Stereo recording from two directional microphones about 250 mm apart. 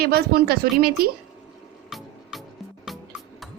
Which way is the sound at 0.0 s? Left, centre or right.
Right.